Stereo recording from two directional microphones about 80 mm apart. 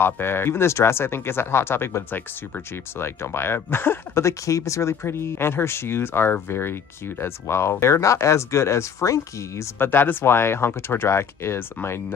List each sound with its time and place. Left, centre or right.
0.0 s speech: left
9.8 s speech: left